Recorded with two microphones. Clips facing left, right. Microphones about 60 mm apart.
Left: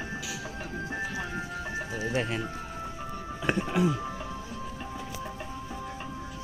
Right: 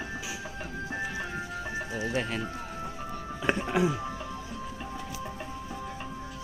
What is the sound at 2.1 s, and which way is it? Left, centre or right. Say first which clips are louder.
Speech: left 2 dB; centre.